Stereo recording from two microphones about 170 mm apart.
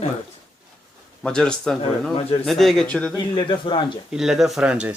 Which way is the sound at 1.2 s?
5° left (ahead or behind).